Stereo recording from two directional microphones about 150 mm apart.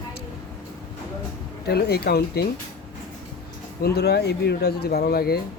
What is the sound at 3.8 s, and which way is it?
Speech, 90° left.